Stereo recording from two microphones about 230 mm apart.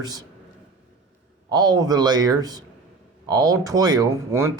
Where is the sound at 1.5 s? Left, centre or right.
Centre.